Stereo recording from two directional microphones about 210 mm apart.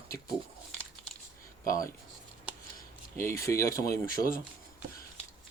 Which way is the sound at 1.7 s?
15° left (ahead or behind).